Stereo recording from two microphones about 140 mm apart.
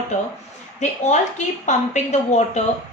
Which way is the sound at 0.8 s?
55° left (ahead or behind).